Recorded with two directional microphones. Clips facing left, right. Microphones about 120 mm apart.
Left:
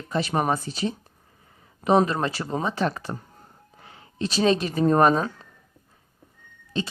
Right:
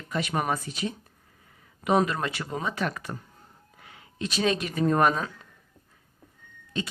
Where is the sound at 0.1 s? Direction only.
30° left (ahead or behind).